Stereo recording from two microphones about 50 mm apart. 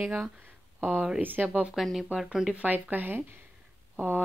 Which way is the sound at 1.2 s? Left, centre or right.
Right.